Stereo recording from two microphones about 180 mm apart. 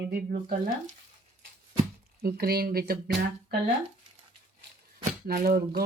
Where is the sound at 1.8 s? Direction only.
55° right (ahead or behind).